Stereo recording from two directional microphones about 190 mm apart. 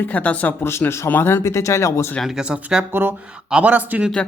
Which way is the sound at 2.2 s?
Centre (ahead or behind).